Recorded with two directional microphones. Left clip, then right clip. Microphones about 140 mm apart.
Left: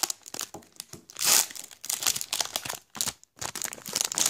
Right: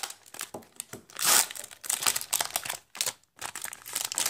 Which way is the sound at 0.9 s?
15° left (ahead or behind).